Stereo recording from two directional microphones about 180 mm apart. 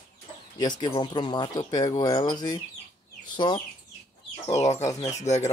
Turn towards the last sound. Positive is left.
turn(degrees=40)  # may be behind; listen again after turning